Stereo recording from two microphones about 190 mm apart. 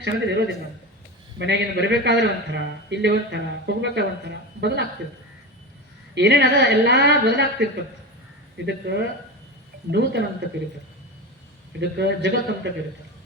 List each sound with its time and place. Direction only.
0.0 s a man's voice: 65° right (ahead or behind)
6.1 s a man's voice: 60° right (ahead or behind)
11.8 s a man's voice: 60° right (ahead or behind)